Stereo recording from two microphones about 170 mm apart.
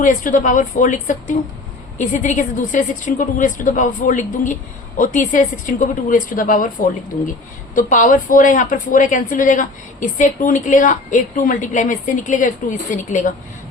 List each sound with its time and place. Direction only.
0.0 s speech: 50° left (ahead or behind)
7.8 s speech: 50° left (ahead or behind)